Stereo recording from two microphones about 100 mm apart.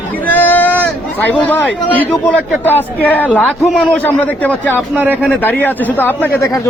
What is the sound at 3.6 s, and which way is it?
Speech, centre (ahead or behind).